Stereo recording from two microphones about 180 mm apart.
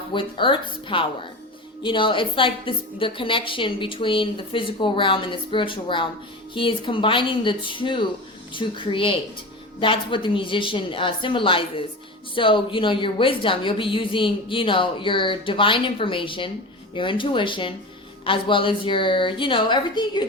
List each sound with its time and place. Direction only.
0.1 s a woman's voice: 25° left (ahead or behind)